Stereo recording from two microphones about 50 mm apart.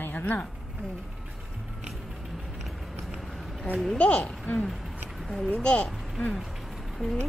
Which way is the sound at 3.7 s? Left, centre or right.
Centre.